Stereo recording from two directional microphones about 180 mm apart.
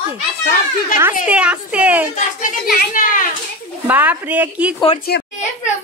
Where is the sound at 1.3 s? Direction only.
5° right (ahead or behind).